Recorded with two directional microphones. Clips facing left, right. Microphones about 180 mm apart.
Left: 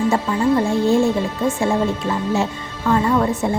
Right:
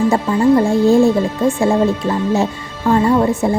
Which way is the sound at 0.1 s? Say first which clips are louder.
Right 5 dB; 35° right (ahead or behind).